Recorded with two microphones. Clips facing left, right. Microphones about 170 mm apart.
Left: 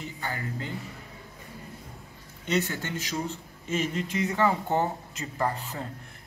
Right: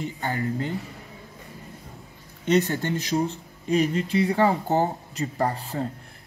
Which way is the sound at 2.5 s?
40° right (ahead or behind).